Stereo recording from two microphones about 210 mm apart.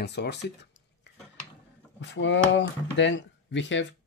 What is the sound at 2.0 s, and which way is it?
Speech, 60° left (ahead or behind).